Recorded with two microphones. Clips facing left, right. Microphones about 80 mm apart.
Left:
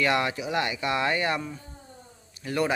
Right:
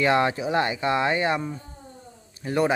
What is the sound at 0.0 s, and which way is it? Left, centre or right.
Speech, right.